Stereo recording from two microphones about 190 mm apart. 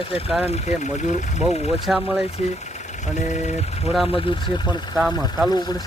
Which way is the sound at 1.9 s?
5° right (ahead or behind).